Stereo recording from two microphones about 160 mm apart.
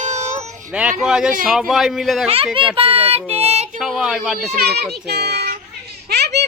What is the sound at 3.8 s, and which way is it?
Speech, 5° right (ahead or behind).